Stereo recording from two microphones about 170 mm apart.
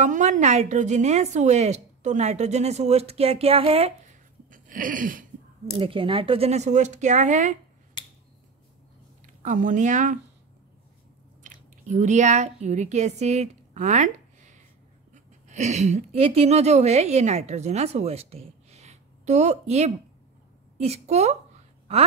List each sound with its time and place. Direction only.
0.0 s a woman's voice: 45° right (ahead or behind)
5.8 s speech: 30° right (ahead or behind)
9.2 s speech: 50° right (ahead or behind)
11.4 s a woman's voice: 45° right (ahead or behind)